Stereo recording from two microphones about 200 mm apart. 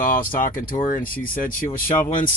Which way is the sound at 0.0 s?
45° left (ahead or behind).